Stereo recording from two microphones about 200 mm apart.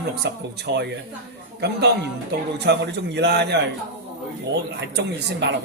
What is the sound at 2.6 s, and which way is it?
Speech, 55° right (ahead or behind).